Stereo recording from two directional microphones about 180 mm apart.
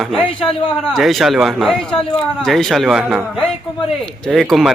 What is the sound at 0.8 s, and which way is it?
Speech, centre (ahead or behind).